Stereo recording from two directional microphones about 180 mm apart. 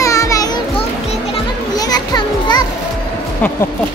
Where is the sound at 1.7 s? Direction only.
20° left (ahead or behind).